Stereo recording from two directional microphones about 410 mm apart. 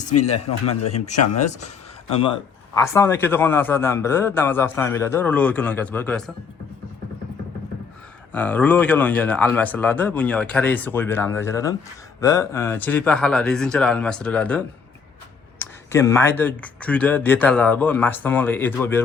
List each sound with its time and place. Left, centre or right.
0.1 s speech: left
0.9 s a man's voice: centre
8.3 s a man's voice: centre